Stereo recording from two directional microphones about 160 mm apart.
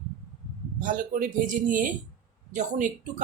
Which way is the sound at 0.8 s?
55° right (ahead or behind).